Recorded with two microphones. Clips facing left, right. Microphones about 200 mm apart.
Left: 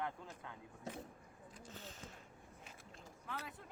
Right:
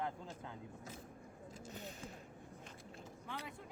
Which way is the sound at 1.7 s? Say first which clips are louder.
Right 4 dB; 15° right (ahead or behind).